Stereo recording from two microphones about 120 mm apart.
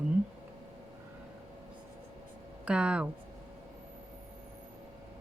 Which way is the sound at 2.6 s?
10° right (ahead or behind).